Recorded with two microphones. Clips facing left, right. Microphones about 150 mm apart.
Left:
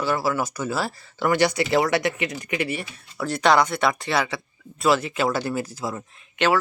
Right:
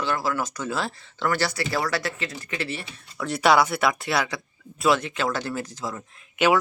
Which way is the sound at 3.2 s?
5° right (ahead or behind).